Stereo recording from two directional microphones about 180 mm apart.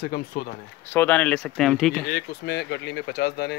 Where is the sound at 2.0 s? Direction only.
60° left (ahead or behind).